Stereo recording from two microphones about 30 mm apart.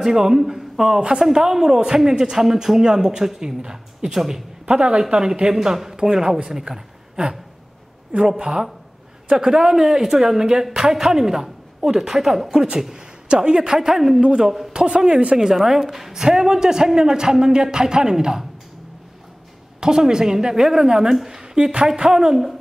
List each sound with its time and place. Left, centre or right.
0.0 s a man's voice: centre
4.6 s speech: right
5.5 s a woman's voice: centre
8.4 s a woman's voice: right
12.9 s speech: right
15.3 s a woman's voice: centre
16.1 s speech: right
19.8 s speech: right
21.6 s speech: right
22.1 s a woman's voice: centre